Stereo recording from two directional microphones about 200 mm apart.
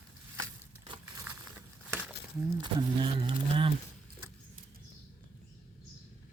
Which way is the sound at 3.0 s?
25° right (ahead or behind).